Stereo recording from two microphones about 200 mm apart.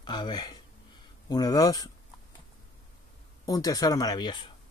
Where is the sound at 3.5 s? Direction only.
15° left (ahead or behind).